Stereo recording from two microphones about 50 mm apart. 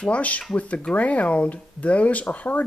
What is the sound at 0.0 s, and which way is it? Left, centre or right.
Speech, left.